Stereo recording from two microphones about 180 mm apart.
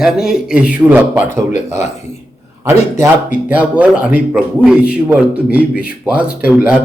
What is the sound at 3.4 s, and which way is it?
Speech, 10° right (ahead or behind).